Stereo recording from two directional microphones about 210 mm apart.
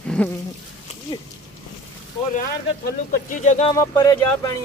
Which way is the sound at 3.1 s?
40° left (ahead or behind).